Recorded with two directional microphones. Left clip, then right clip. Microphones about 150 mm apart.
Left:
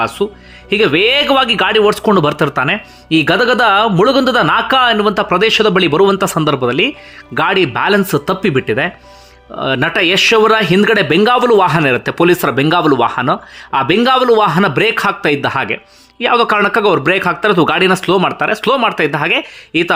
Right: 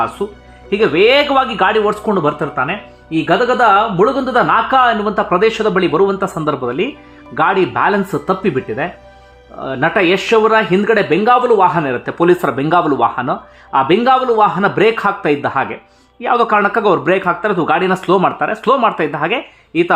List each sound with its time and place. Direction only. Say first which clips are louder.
0.2 s speech: left 4 dB; 10° left (ahead or behind); by 11.7 s 30° left (ahead or behind)
11.7 s speech: left 4 dB; 20° left (ahead or behind)